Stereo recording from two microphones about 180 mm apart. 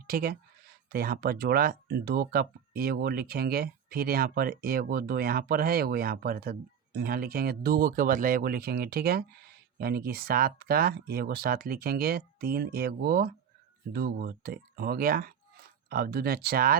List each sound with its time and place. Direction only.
0.1 s speech: 55° right (ahead or behind)